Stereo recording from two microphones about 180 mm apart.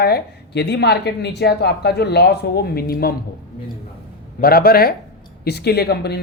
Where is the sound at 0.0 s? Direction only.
65° left (ahead or behind).